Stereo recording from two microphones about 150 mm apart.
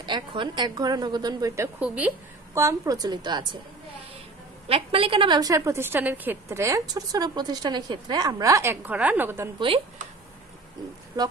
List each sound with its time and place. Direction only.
0.0 s a woman's voice: 35° right (ahead or behind)
1.8 s speech: 10° right (ahead or behind)
2.5 s a woman's voice: 20° right (ahead or behind)
4.6 s a woman's voice: 40° right (ahead or behind); by 9.5 s 15° right (ahead or behind)